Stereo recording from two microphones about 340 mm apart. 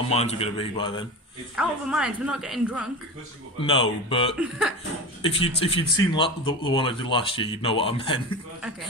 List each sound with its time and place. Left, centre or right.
0.1 s a man's voice: centre
1.6 s a woman's voice: centre
3.6 s a man's voice: centre
4.4 s a woman's voice: centre
5.2 s a man's voice: centre